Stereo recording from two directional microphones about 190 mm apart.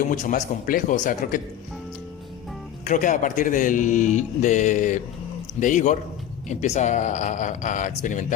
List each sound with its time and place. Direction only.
0.1 s speech: 45° left (ahead or behind)
2.8 s speech: 40° left (ahead or behind)